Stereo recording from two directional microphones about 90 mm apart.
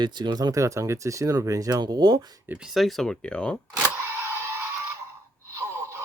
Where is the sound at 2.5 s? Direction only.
5° right (ahead or behind); by 3.6 s 10° left (ahead or behind).